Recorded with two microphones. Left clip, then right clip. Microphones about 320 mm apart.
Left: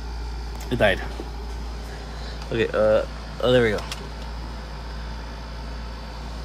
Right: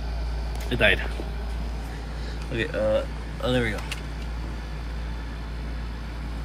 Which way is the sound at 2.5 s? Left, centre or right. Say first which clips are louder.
Left 5 dB; left.